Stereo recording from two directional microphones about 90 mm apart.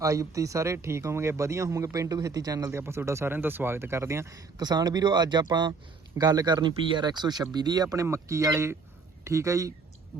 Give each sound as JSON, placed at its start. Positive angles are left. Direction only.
{"t": 0.0, "sound": "speech", "side_deg": -35}
{"t": 8.0, "sound": "speech", "side_deg": -35}